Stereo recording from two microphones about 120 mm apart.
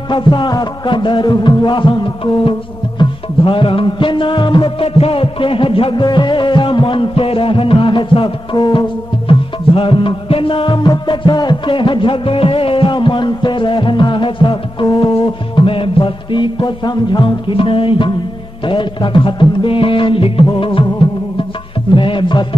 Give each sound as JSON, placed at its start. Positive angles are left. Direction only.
{"t": 0.1, "sound": "music", "side_deg": 40}
{"t": 4.8, "sound": "music", "side_deg": 55}
{"t": 21.9, "sound": "music", "side_deg": 45}